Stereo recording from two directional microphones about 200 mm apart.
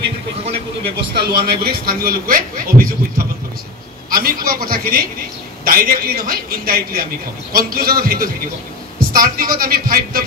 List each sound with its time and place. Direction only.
0.8 s speech: 55° right (ahead or behind)
4.1 s speech: 45° right (ahead or behind)